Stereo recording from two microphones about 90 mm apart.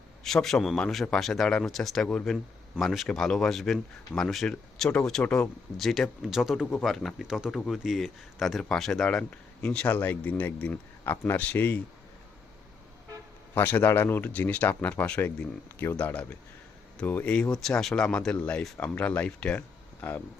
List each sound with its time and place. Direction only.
0.3 s speech: 5° left (ahead or behind)
7.3 s speech: 5° right (ahead or behind); by 11.8 s 20° left (ahead or behind)
13.5 s speech: 20° left (ahead or behind)
20.0 s speech: 25° left (ahead or behind)